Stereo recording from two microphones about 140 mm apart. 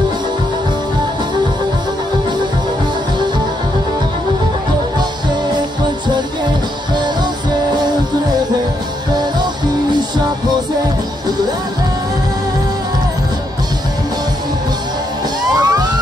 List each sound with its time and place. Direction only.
15.5 s music: 25° right (ahead or behind)